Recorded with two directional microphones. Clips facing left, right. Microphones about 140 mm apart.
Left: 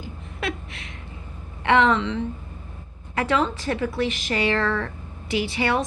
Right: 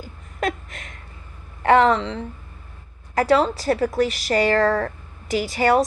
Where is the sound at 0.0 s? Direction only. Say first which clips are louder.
Right 4 dB; 45° right (ahead or behind).